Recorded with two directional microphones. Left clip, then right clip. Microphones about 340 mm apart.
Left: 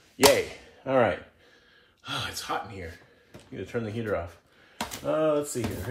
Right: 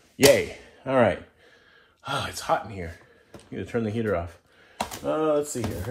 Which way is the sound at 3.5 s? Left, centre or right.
Right.